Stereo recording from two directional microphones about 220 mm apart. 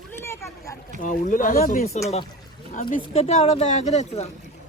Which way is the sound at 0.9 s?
35° left (ahead or behind).